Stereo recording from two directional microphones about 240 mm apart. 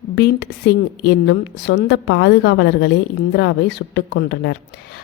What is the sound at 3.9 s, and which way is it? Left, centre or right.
Speech, left.